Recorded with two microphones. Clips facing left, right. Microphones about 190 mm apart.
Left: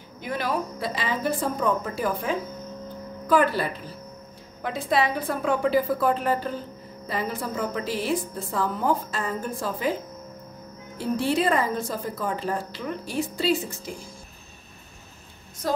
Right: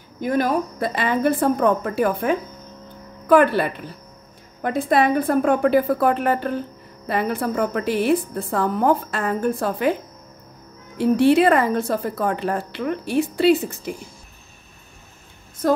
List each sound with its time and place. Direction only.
0.2 s a woman's voice: 45° right (ahead or behind); by 9.9 s 65° right (ahead or behind)
11.0 s a woman's voice: 65° right (ahead or behind)